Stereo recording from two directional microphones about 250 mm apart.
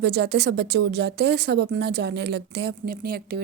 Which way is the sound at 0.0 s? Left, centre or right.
Right.